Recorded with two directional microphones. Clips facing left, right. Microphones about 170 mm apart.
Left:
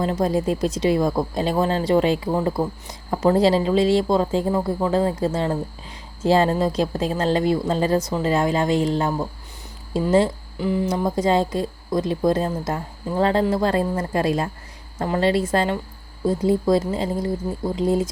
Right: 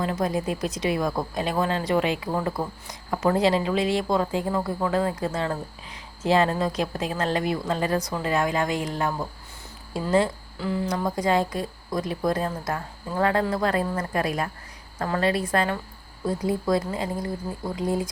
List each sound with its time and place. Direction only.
0.0 s a woman's voice: 30° left (ahead or behind)